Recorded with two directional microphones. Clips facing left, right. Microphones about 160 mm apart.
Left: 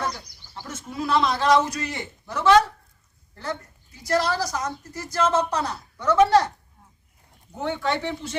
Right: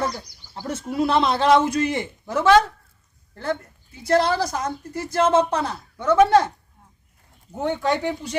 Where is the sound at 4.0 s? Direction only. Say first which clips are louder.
Right 4 dB; 55° right (ahead or behind).